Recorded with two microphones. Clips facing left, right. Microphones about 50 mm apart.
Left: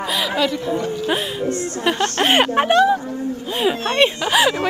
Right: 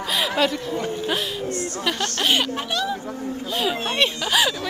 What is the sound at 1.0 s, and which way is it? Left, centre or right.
Speech, left.